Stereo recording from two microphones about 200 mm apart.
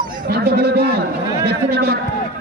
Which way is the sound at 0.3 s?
50° right (ahead or behind).